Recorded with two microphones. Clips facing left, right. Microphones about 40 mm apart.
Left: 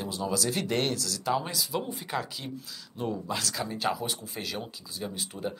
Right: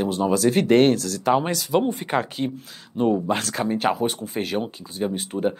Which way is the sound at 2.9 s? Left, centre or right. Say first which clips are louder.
Right 11 dB; right.